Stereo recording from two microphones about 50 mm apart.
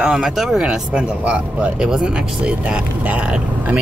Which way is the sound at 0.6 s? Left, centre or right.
Centre.